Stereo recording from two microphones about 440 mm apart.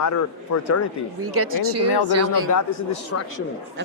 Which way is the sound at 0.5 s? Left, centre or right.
Left.